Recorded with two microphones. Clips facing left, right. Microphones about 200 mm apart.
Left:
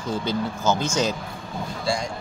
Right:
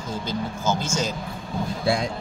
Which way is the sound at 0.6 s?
10° right (ahead or behind).